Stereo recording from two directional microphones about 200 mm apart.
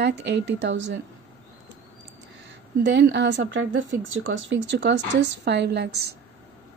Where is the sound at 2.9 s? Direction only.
60° right (ahead or behind).